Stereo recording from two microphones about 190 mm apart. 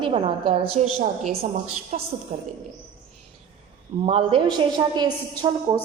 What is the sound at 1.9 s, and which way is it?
Speech, 35° right (ahead or behind).